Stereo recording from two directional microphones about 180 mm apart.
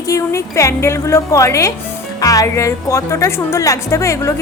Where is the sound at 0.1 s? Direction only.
15° left (ahead or behind).